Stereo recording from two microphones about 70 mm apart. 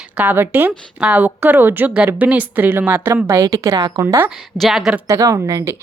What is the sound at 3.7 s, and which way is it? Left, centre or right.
Speech, right.